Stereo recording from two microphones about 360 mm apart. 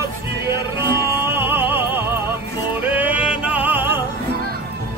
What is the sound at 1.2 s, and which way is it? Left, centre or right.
Music, centre.